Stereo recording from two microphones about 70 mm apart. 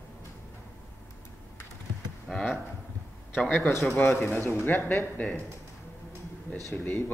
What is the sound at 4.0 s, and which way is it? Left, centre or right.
Speech, left.